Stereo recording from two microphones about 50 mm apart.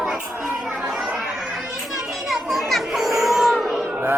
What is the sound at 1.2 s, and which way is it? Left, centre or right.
Chatter, centre.